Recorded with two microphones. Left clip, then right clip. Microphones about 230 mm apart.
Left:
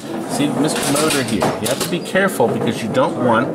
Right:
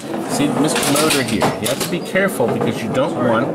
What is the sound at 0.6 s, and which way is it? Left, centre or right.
Speech, centre.